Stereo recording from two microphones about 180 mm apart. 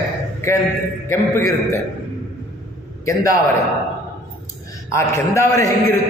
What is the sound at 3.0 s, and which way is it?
Speech, 20° left (ahead or behind).